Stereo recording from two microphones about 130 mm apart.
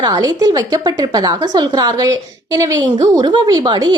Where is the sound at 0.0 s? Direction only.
30° right (ahead or behind).